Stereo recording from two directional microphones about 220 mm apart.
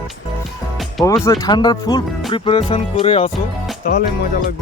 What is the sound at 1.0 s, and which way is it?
Speech, 15° left (ahead or behind).